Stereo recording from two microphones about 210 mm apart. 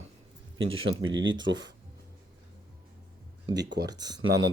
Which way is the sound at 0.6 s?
65° right (ahead or behind).